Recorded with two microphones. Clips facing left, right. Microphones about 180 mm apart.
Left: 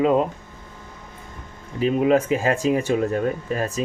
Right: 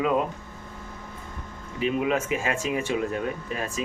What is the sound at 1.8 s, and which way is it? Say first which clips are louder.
Speech: left 7 dB; 40° left (ahead or behind).